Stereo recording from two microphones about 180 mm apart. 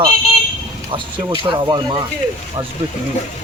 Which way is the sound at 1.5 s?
25° right (ahead or behind).